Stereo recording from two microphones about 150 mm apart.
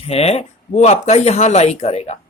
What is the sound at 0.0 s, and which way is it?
Speech, 40° left (ahead or behind).